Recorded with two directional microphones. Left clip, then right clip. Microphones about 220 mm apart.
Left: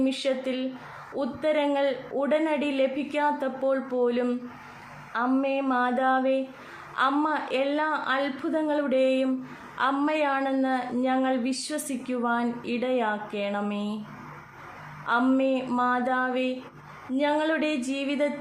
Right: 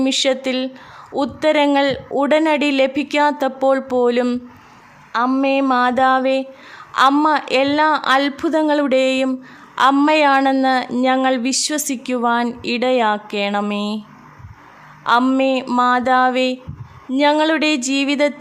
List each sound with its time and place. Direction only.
0.0 s speech: 50° right (ahead or behind)
15.0 s speech: 45° right (ahead or behind)